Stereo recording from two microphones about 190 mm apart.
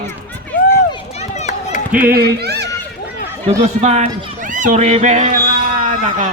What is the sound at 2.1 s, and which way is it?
Speech, 60° right (ahead or behind).